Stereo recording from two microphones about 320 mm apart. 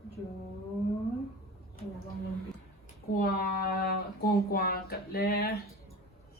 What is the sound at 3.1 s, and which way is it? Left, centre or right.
Speech, left.